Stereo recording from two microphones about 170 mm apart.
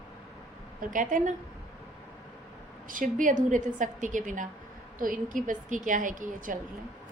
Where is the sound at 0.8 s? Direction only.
50° right (ahead or behind).